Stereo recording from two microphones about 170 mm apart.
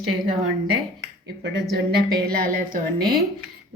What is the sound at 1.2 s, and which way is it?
Speech, 90° right.